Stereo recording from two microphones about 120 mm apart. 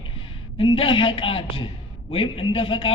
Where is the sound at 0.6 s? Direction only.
45° left (ahead or behind).